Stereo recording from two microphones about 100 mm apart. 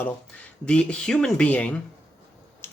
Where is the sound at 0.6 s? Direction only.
10° left (ahead or behind).